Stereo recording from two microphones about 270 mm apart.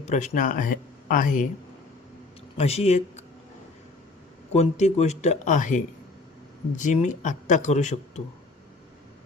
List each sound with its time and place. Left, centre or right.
0.0 s speech: left
2.6 s speech: left
4.5 s speech: left